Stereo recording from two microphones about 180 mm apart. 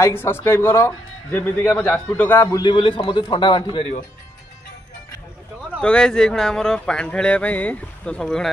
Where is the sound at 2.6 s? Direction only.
30° left (ahead or behind).